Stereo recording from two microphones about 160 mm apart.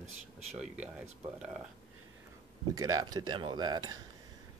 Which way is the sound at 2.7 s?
20° right (ahead or behind).